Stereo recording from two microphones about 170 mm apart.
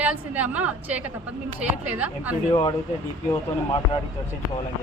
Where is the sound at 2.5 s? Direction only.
25° left (ahead or behind).